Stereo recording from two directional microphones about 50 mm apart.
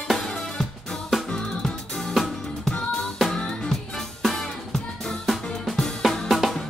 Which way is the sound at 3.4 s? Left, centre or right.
Centre.